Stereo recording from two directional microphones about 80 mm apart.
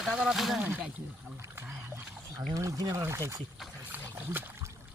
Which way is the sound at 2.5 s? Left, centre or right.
Right.